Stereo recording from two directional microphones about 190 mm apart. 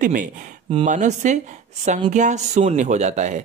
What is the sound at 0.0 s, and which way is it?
Speech, 45° right (ahead or behind).